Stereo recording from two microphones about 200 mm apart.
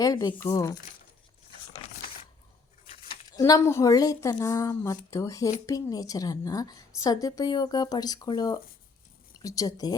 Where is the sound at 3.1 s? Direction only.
20° left (ahead or behind).